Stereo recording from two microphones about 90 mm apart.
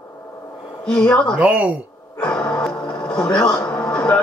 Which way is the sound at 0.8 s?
10° left (ahead or behind).